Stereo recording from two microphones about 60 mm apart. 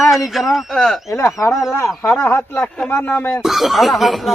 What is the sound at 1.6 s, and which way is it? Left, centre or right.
Speech, left.